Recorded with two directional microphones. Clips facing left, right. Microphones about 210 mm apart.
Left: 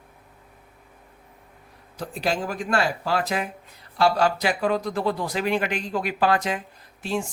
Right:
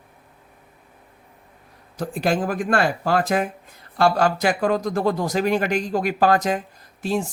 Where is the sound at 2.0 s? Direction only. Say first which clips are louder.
Right 4 dB; 50° right (ahead or behind).